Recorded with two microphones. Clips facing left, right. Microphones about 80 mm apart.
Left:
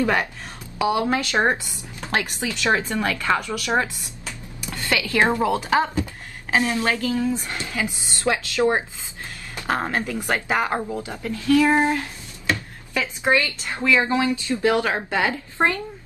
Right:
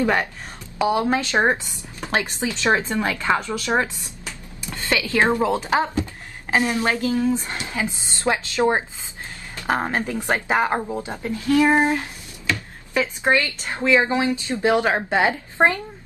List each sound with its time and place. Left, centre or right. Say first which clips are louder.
0.0 s a woman's voice: right 1 dB; right